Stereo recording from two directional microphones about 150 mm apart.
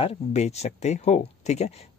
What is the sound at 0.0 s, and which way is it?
Speech, 45° left (ahead or behind).